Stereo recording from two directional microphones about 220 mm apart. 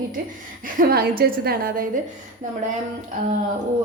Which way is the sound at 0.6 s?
40° right (ahead or behind).